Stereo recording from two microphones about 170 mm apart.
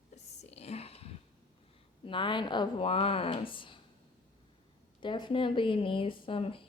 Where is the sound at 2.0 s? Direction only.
30° left (ahead or behind).